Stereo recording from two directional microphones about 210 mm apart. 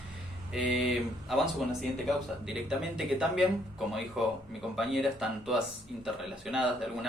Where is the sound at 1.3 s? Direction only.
Centre (ahead or behind).